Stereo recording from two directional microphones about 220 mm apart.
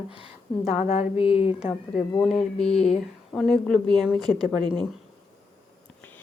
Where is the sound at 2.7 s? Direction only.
30° left (ahead or behind).